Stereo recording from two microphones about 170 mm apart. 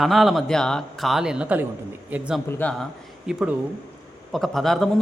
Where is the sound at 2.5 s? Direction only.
10° left (ahead or behind).